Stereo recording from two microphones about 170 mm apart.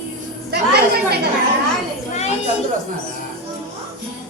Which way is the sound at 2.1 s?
40° left (ahead or behind).